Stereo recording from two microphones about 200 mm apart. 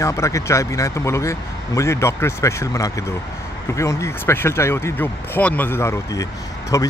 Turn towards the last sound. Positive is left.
turn(degrees=15)  # may be behind; listen again after turning